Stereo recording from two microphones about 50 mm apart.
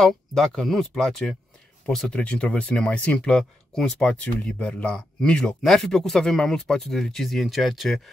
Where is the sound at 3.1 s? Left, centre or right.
Centre.